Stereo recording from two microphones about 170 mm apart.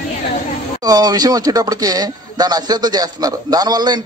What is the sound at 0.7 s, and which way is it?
Speech, 25° right (ahead or behind).